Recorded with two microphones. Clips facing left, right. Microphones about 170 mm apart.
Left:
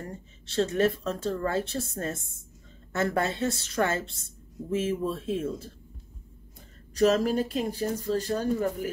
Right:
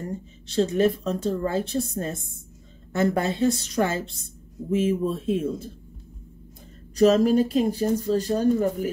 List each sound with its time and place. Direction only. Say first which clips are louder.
0.0 s speech: right 7 dB; 20° right (ahead or behind)
7.0 s speech: right 5 dB; 20° right (ahead or behind)